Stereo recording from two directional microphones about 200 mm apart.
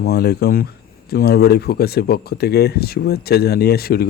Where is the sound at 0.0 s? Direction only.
55° left (ahead or behind).